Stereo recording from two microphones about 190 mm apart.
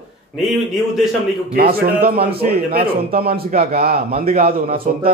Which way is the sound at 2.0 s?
55° right (ahead or behind).